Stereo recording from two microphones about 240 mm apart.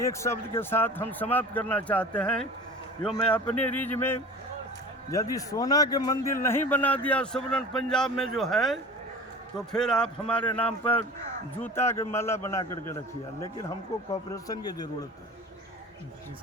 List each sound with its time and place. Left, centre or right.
0.0 s a man's voice: centre